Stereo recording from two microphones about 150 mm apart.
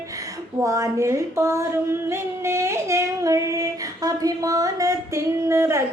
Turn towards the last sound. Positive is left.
turn(degrees=-20)  # may be behind; listen again after turning